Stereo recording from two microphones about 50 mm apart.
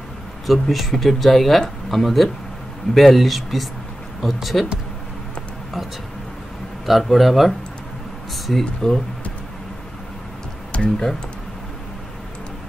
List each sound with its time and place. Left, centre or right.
0.5 s speech: centre
6.9 s speech: centre
10.7 s speech: left